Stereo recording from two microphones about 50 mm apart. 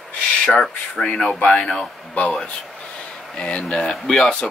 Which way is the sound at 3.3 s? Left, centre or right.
Left.